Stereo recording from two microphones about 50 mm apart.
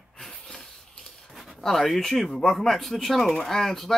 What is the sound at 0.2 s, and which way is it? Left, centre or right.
Speech, centre.